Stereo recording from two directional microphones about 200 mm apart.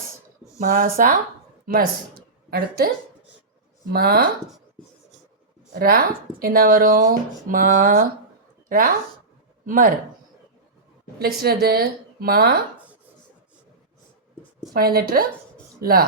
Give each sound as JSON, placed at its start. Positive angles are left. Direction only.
{"t": 0.6, "sound": "a woman's voice", "side_deg": -45}
{"t": 3.9, "sound": "speech", "side_deg": -50}
{"t": 5.8, "sound": "speech", "side_deg": -50}
{"t": 9.6, "sound": "speech", "side_deg": -40}
{"t": 11.2, "sound": "speech", "side_deg": -50}
{"t": 14.7, "sound": "speech", "side_deg": -50}